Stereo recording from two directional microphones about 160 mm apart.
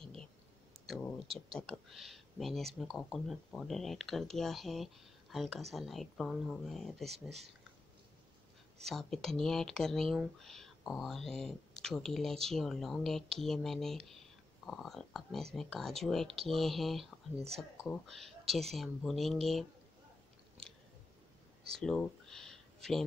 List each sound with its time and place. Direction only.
0.0 s a sound: 5° left (ahead or behind)
1.2 s speech: 35° right (ahead or behind)
1.7 s speech: centre (ahead or behind)
7.1 s speech: 40° right (ahead or behind)
8.8 s speech: centre (ahead or behind)
21.7 s speech: 5° left (ahead or behind)